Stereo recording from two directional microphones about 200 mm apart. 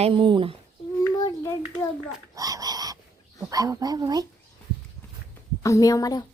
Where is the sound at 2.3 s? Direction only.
20° right (ahead or behind).